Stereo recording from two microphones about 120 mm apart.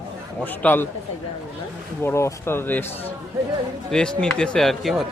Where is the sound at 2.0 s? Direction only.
20° left (ahead or behind).